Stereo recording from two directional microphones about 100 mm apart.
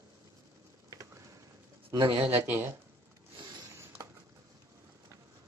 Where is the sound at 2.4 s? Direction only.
20° right (ahead or behind).